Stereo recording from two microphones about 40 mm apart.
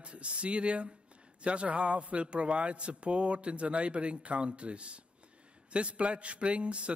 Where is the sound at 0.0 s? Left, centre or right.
Right.